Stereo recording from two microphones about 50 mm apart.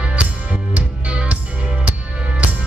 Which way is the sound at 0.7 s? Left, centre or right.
Right.